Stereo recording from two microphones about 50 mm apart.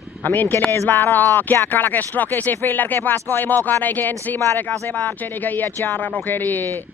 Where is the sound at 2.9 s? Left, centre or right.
Left.